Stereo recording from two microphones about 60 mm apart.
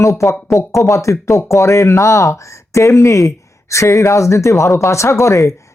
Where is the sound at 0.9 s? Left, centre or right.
Left.